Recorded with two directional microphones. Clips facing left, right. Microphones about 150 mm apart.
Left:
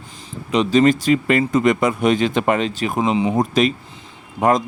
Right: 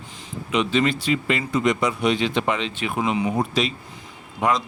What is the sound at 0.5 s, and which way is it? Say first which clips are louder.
Speech: left 6 dB; 40° left (ahead or behind).